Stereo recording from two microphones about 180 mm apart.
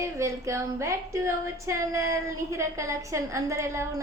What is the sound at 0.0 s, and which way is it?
A woman's voice, 15° right (ahead or behind).